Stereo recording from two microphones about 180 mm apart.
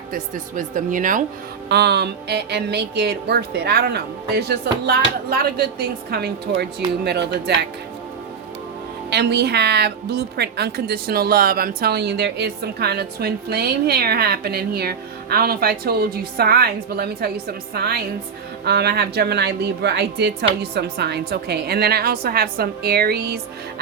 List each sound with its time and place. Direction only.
0.1 s speech: 50° right (ahead or behind)
1.7 s a woman's voice: 65° right (ahead or behind)
9.0 s a woman's voice: 65° right (ahead or behind)